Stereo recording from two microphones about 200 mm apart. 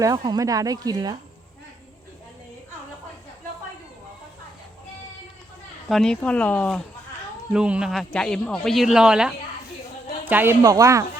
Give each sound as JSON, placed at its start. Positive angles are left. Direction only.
{"t": 0.0, "sound": "speech", "side_deg": -20}
{"t": 5.9, "sound": "a man's voice", "side_deg": 5}